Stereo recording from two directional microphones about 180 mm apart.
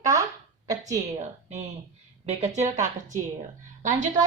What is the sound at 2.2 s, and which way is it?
A woman's voice, 40° right (ahead or behind).